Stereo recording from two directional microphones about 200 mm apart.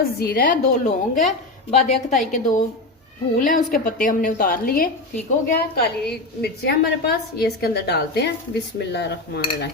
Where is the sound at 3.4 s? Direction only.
40° left (ahead or behind).